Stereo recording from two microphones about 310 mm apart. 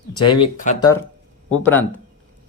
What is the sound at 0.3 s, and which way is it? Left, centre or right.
Speech, centre.